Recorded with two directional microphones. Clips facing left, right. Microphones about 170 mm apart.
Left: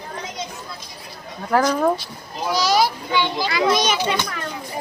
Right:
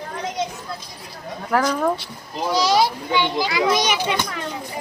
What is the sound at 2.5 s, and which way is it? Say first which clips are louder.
A child's voice: right 1 dB; 25° right (ahead or behind).